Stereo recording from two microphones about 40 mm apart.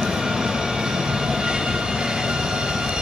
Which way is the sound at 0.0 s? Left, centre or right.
Centre.